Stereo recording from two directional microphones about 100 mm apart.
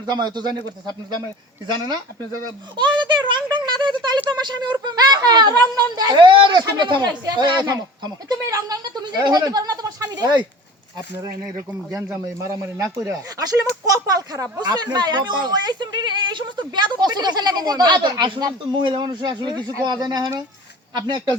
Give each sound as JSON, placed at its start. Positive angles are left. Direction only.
{"t": 0.0, "sound": "speech", "side_deg": -45}